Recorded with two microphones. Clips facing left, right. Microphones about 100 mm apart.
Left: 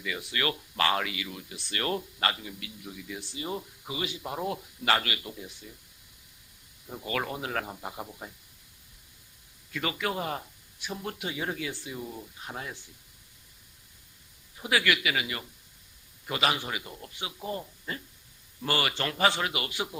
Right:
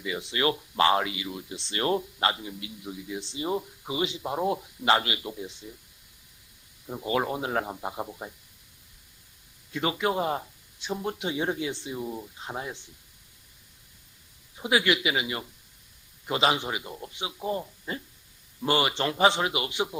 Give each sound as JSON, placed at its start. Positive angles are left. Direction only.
{"t": 0.0, "sound": "speech", "side_deg": -25}
{"t": 6.8, "sound": "speech", "side_deg": -20}
{"t": 9.7, "sound": "speech", "side_deg": -25}
{"t": 14.6, "sound": "speech", "side_deg": -20}